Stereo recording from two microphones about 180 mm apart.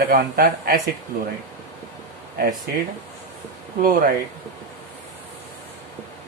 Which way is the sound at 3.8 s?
55° right (ahead or behind).